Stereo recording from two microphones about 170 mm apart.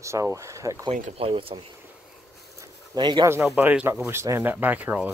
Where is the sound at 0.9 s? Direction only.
40° right (ahead or behind).